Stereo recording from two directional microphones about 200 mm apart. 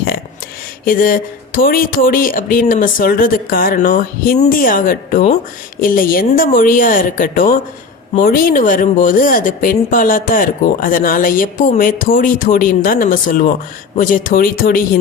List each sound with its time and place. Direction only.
0.9 s speech: 45° left (ahead or behind)